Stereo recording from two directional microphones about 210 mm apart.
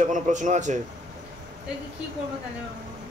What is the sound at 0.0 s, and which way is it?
Speech, 35° right (ahead or behind).